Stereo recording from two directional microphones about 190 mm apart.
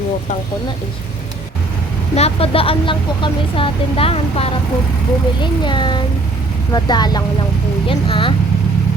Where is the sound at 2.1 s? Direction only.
30° left (ahead or behind).